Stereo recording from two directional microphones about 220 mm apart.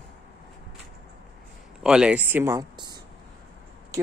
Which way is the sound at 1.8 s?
5° right (ahead or behind).